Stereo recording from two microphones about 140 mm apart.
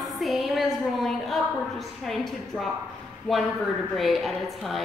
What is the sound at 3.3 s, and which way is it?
A woman's voice, centre (ahead or behind).